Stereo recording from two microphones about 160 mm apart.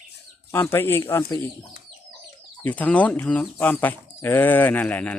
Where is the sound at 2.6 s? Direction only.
10° left (ahead or behind).